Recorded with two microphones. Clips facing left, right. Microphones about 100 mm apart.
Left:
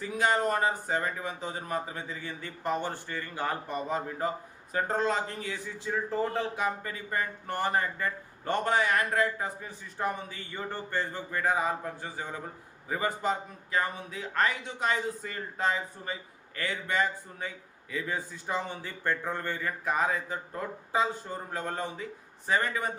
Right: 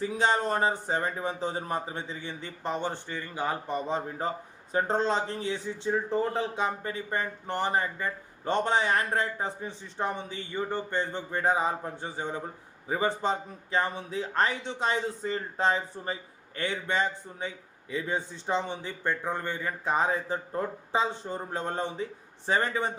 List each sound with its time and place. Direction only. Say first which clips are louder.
0.0 s speech: right 1 dB; 25° right (ahead or behind)